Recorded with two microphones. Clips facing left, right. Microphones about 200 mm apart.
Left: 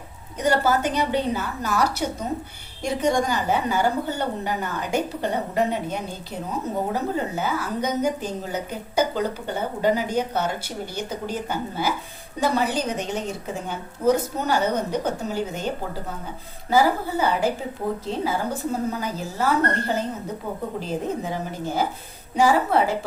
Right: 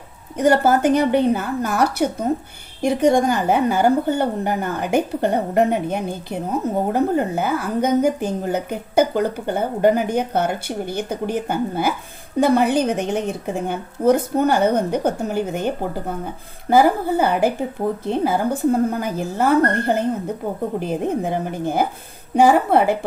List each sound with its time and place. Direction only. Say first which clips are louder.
0.3 s a woman's voice: right 5 dB; 55° right (ahead or behind)